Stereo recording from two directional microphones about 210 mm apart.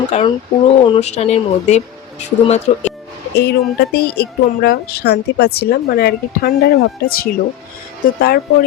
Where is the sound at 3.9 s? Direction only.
50° left (ahead or behind).